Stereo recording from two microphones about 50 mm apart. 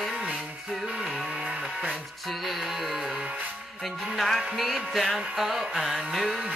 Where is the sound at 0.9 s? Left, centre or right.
Centre.